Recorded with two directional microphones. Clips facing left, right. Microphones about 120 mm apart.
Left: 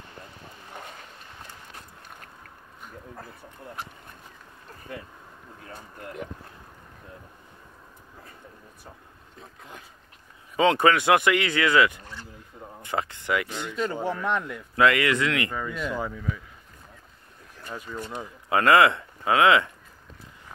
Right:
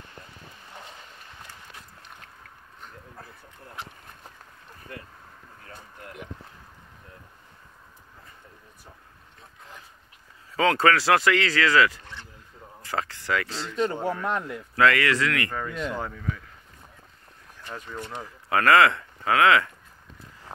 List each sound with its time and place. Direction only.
10.5 s speech: 20° left (ahead or behind)
13.9 s speech: centre (ahead or behind)
14.3 s speech: 15° right (ahead or behind)
14.8 s speech: 20° left (ahead or behind)
15.5 s speech: 5° left (ahead or behind)
17.6 s speech: 5° left (ahead or behind)